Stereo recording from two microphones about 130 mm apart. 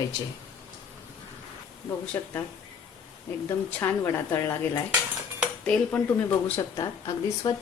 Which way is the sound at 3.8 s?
20° left (ahead or behind).